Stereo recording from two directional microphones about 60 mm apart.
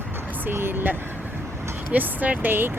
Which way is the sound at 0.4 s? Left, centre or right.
Right.